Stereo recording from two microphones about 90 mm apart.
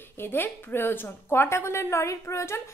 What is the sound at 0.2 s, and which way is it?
A woman's voice, 25° left (ahead or behind).